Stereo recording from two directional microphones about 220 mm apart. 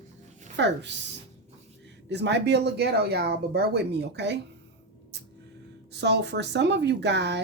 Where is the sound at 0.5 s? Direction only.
55° right (ahead or behind).